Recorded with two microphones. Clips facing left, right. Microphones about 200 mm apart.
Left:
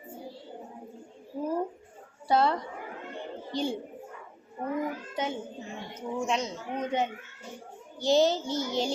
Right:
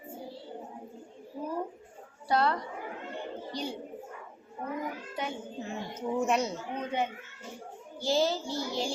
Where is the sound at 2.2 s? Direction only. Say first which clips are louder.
Left 3 dB; 25° left (ahead or behind).